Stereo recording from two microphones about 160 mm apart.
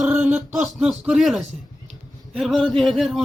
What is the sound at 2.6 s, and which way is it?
Speech, centre (ahead or behind).